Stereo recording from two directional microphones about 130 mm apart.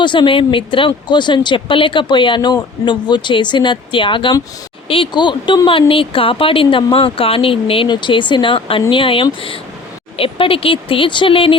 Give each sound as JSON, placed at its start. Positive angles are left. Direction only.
{"t": 0.0, "sound": "speech", "side_deg": 40}